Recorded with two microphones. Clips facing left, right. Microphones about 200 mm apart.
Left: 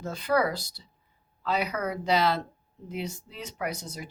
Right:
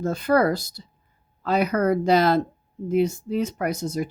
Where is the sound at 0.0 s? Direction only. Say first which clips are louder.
Right 6 dB; 50° right (ahead or behind).